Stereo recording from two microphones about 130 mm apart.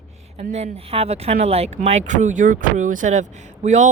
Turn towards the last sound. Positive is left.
turn(degrees=-65)  # may be behind; listen again after turning